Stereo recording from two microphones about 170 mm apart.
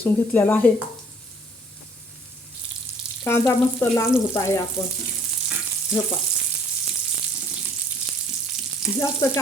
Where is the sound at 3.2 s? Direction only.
15° left (ahead or behind).